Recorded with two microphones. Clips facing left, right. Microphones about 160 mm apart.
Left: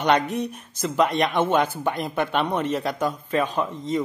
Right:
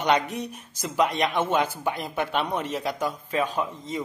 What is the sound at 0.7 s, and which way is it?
A man's voice, 10° right (ahead or behind).